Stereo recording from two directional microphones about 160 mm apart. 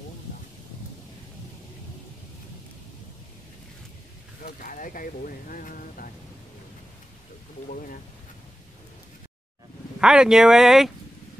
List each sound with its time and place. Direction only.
4.6 s speech: 60° left (ahead or behind)
7.6 s speech: 60° left (ahead or behind)
9.9 s speech: 5° right (ahead or behind)